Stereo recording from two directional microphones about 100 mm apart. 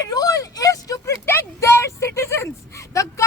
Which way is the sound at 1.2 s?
25° left (ahead or behind).